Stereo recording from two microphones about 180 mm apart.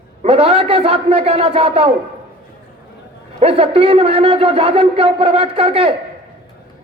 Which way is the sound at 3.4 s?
30° right (ahead or behind).